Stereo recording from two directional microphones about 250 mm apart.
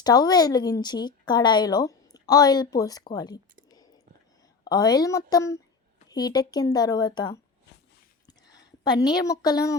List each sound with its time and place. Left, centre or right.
0.0 s speech: centre
3.7 s whispering: centre
4.6 s speech: centre
8.3 s a sound: centre